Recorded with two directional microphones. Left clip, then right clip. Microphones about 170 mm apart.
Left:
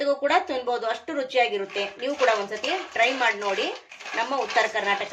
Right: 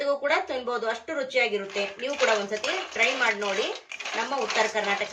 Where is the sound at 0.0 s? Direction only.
35° left (ahead or behind).